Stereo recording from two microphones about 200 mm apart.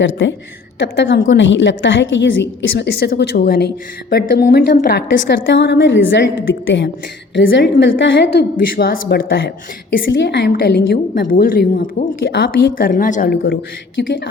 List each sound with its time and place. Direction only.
0.0 s a woman's voice: 70° left (ahead or behind)
0.8 s a woman's voice: 60° left (ahead or behind); by 13.3 s 40° left (ahead or behind)
13.3 s a woman's voice: 55° left (ahead or behind)